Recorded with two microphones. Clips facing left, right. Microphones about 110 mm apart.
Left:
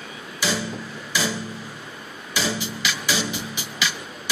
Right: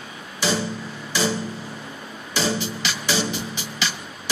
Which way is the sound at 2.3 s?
30° right (ahead or behind).